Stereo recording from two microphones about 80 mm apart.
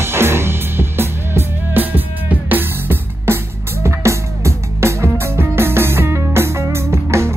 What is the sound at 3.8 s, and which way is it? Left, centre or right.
Music, right.